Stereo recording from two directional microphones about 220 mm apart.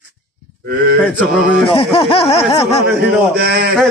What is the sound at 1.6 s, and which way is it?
Speech, 25° left (ahead or behind).